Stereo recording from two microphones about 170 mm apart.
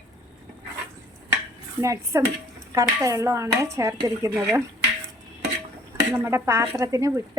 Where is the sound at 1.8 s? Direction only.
15° right (ahead or behind).